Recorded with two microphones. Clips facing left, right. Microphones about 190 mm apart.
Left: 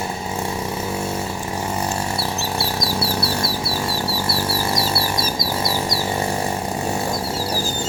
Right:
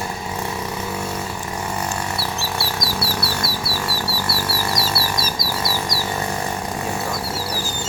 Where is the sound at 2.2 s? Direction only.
25° left (ahead or behind).